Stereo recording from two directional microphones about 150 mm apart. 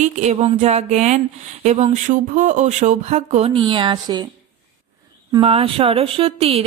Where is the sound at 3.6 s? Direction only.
30° right (ahead or behind).